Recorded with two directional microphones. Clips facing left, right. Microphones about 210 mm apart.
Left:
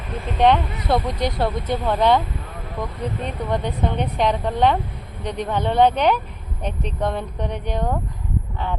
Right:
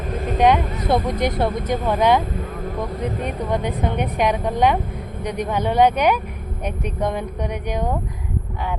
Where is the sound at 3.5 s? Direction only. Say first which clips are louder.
Even; 15° right (ahead or behind).